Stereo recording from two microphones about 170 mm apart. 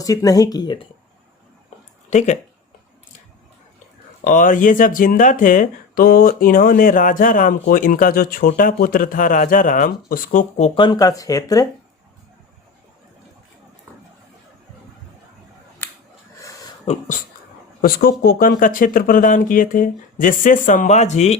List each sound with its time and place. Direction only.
0.0 s speech: 20° left (ahead or behind)
2.0 s speech: 40° left (ahead or behind)
4.2 s speech: 50° left (ahead or behind)
10.8 s speech: 25° left (ahead or behind)
16.8 s speech: 40° left (ahead or behind)
17.7 s speech: 60° left (ahead or behind); by 21.3 s 40° left (ahead or behind)